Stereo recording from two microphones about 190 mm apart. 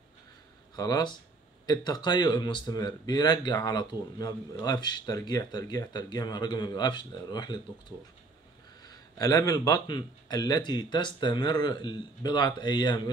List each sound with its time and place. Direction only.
0.7 s a man's voice: 20° left (ahead or behind)
8.8 s a man's voice: 20° left (ahead or behind)